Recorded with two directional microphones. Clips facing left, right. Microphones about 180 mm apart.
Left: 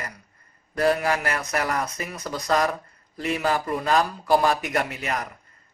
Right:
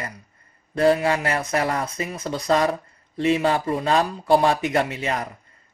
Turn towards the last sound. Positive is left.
turn(degrees=-30)  # may be behind; listen again after turning